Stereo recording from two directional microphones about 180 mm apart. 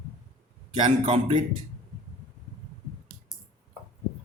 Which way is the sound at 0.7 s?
30° right (ahead or behind).